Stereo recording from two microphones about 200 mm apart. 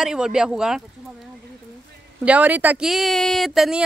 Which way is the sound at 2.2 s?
5° right (ahead or behind).